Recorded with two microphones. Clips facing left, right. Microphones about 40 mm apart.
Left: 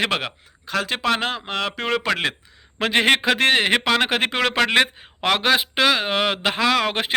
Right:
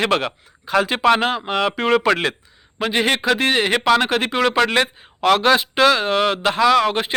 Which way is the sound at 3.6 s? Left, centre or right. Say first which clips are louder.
Right 3 dB; left.